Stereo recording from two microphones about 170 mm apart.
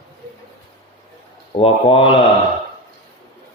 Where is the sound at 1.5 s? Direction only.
35° left (ahead or behind).